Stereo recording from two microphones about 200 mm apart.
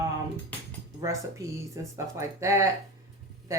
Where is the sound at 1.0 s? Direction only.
15° right (ahead or behind).